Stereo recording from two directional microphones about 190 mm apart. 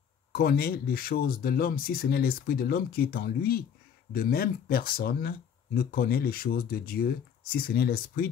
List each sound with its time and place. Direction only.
0.3 s speech: 55° left (ahead or behind)